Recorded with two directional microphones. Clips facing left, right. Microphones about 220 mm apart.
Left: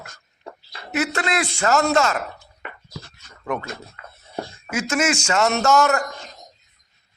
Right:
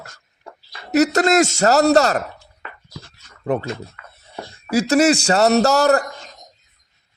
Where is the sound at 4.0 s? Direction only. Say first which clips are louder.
Left 2 dB; 30° left (ahead or behind).